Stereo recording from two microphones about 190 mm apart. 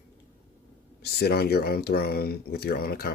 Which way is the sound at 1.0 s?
60° left (ahead or behind).